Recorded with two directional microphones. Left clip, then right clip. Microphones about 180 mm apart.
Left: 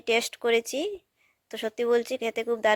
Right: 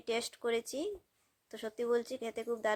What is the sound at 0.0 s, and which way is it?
Speech, 30° left (ahead or behind).